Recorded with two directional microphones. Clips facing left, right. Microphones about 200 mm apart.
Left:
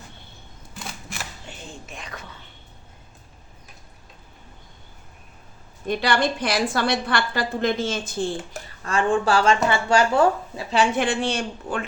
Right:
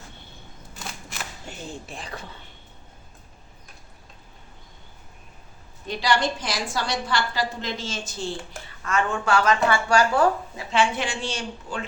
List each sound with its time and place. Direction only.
1.5 s speech: 35° right (ahead or behind)
5.9 s a woman's voice: 55° left (ahead or behind)
8.8 s speech: 30° left (ahead or behind)
10.9 s a woman's voice: 55° left (ahead or behind)